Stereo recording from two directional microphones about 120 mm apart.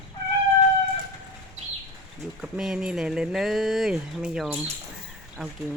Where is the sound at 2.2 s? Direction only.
5° right (ahead or behind).